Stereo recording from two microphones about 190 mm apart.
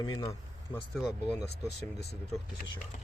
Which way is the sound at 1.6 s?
60° left (ahead or behind).